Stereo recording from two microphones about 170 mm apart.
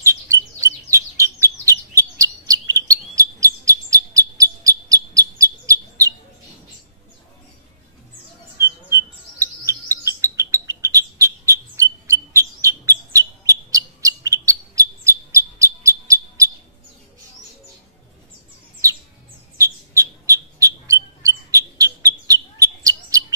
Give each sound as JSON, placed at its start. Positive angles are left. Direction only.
{"t": 0.0, "sound": "bird", "side_deg": -20}
{"t": 8.5, "sound": "bird", "side_deg": -15}
{"t": 19.6, "sound": "bird", "side_deg": -15}